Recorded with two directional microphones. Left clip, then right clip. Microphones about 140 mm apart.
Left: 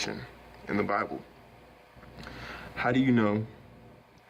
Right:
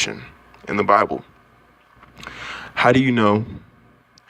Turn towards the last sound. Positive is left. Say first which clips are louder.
# right 11 dB
turn(degrees=-45)  # may be behind; listen again after turning